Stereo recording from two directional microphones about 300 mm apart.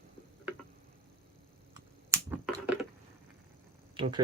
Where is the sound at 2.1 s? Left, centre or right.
Centre.